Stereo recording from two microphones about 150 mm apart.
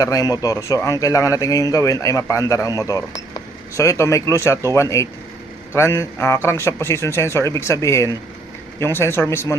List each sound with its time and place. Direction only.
0.0 s a man's voice: 25° left (ahead or behind)